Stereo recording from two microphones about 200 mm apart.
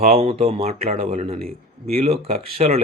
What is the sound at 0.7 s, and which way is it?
Speech, 45° right (ahead or behind).